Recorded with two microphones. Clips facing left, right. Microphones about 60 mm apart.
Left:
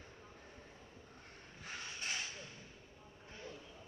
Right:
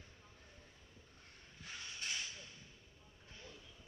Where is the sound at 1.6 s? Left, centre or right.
Left.